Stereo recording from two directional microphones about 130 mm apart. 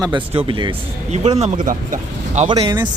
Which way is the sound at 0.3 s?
40° right (ahead or behind).